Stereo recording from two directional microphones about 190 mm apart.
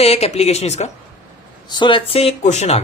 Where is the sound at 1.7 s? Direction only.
25° left (ahead or behind).